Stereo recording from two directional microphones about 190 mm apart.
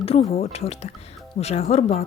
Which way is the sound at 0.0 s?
30° left (ahead or behind).